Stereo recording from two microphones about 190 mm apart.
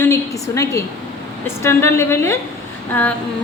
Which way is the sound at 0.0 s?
15° left (ahead or behind).